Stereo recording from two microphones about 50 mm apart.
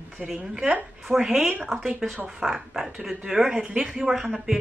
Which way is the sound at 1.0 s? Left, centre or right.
Centre.